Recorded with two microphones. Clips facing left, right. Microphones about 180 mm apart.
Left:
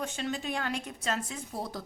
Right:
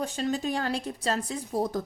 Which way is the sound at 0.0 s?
35° right (ahead or behind).